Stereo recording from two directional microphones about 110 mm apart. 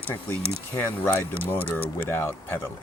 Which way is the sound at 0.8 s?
20° left (ahead or behind).